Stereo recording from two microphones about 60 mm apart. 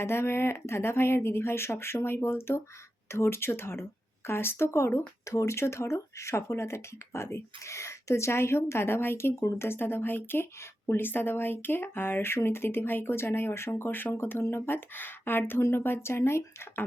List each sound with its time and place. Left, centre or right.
0.0 s speech: left